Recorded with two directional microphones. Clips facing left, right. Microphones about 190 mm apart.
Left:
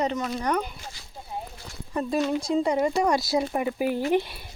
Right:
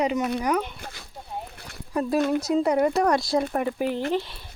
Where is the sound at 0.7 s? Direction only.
60° right (ahead or behind).